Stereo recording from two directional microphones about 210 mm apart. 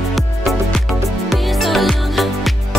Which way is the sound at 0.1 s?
Centre (ahead or behind).